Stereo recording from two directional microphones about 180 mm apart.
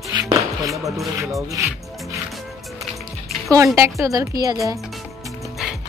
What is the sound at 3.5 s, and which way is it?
Speech, 15° right (ahead or behind).